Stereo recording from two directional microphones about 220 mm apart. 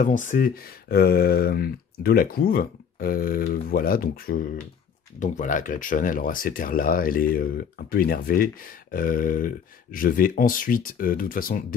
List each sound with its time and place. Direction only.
0.0 s speech: 35° left (ahead or behind)